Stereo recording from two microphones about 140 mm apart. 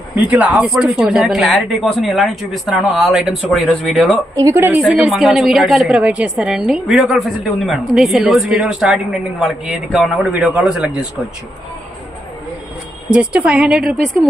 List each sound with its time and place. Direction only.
0.2 s a woman's voice: 10° right (ahead or behind)
4.4 s a woman's voice: 20° right (ahead or behind)
4.9 s a woman's voice: centre (ahead or behind)
13.1 s a woman's voice: 5° right (ahead or behind)